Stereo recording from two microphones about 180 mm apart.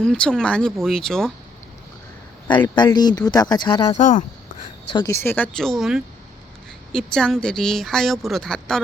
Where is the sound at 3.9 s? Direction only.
45° left (ahead or behind).